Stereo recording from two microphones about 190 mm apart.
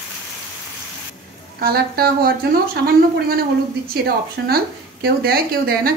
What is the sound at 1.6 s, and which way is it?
A woman's voice, 55° right (ahead or behind).